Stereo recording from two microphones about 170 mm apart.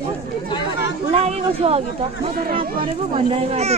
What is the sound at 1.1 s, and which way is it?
Speech, 35° right (ahead or behind).